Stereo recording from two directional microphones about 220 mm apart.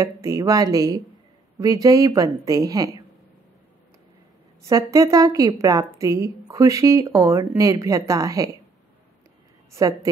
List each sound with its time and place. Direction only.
0.0 s a woman's voice: 15° right (ahead or behind)
4.6 s a woman's voice: 15° right (ahead or behind)
9.7 s a woman's voice: 15° right (ahead or behind)